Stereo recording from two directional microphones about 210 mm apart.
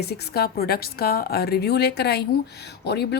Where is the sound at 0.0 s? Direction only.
50° left (ahead or behind).